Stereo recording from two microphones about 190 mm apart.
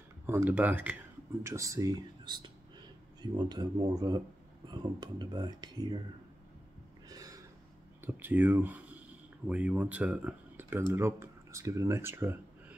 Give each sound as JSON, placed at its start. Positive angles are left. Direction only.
{"t": 0.3, "sound": "speech", "side_deg": -10}
{"t": 7.1, "sound": "a sound", "side_deg": -20}
{"t": 8.0, "sound": "speech", "side_deg": -10}